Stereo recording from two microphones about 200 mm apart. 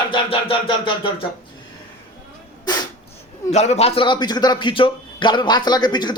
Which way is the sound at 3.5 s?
35° left (ahead or behind).